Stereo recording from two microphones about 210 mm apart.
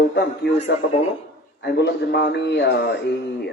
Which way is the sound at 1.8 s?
50° left (ahead or behind).